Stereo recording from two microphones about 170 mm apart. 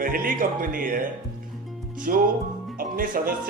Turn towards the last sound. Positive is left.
turn(degrees=-55)  # may be behind; listen again after turning